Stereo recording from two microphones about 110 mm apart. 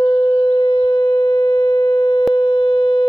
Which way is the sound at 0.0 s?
55° left (ahead or behind).